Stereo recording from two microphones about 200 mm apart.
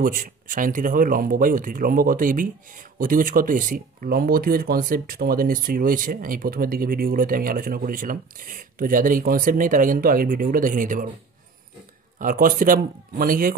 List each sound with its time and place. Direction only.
0.0 s speech: 45° right (ahead or behind)
12.2 s speech: 45° right (ahead or behind)